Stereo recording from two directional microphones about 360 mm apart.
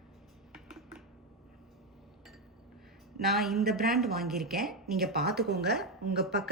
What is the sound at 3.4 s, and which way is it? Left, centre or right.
Speech, centre.